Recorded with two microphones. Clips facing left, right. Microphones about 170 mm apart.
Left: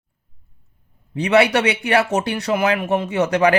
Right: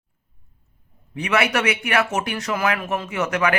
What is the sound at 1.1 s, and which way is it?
Speech, 30° left (ahead or behind).